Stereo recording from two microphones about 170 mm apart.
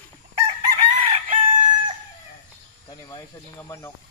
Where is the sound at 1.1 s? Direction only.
45° right (ahead or behind).